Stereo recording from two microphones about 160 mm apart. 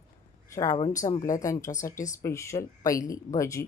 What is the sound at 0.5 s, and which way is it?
A woman's voice, 20° left (ahead or behind).